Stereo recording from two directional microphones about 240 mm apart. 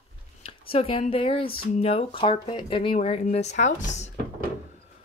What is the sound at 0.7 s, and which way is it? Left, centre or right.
Speech, left.